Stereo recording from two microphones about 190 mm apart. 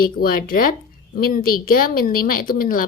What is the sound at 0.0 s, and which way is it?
A woman's voice, 50° left (ahead or behind).